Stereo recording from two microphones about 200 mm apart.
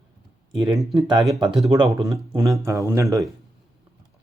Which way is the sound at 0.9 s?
20° right (ahead or behind).